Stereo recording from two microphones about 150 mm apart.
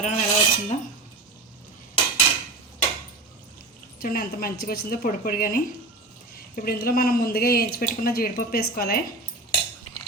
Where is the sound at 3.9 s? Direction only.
75° left (ahead or behind).